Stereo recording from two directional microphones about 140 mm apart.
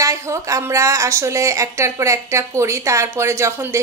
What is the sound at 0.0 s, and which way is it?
A woman's voice, 25° right (ahead or behind).